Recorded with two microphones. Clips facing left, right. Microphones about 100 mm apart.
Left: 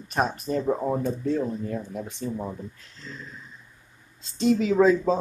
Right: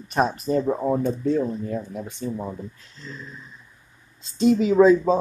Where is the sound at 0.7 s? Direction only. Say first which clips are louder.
Right 3 dB; 5° right (ahead or behind).